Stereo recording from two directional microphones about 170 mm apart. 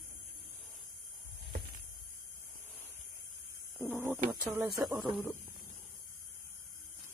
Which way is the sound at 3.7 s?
10° right (ahead or behind).